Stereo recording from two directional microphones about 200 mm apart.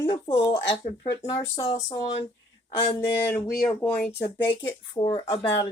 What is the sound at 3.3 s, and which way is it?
Speech, 10° left (ahead or behind).